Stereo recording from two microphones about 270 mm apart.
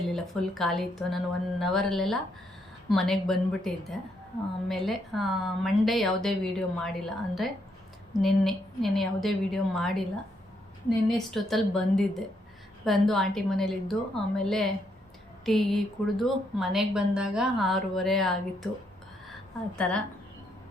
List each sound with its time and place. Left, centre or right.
0.1 s a woman's voice: centre